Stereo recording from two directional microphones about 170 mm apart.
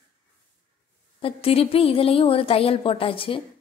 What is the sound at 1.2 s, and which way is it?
A woman's voice, 35° left (ahead or behind).